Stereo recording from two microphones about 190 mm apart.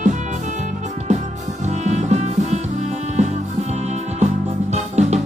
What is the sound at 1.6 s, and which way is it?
Music, 35° right (ahead or behind).